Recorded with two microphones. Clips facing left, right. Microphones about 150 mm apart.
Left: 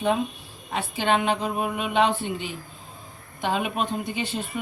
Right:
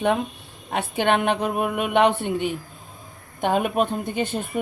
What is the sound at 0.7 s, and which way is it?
A woman's voice, 60° right (ahead or behind).